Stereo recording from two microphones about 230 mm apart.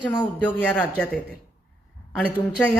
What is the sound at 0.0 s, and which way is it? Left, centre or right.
Speech, centre.